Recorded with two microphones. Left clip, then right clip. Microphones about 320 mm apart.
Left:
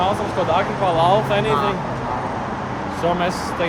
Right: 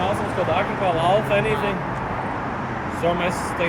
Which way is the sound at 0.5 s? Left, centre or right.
Centre.